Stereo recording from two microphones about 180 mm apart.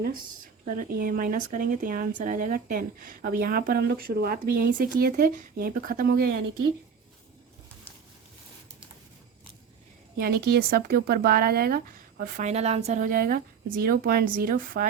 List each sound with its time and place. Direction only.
0.6 s speech: 45° right (ahead or behind)
10.2 s speech: 60° right (ahead or behind)
12.4 s speech: 40° right (ahead or behind)